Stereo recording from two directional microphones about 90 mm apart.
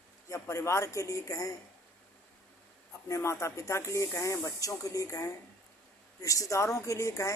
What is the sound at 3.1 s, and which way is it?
Speech, 35° left (ahead or behind).